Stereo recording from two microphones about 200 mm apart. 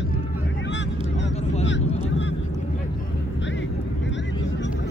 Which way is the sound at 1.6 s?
65° left (ahead or behind).